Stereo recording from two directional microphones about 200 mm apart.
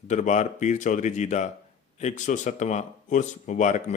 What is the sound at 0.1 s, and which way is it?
Speech, 35° left (ahead or behind).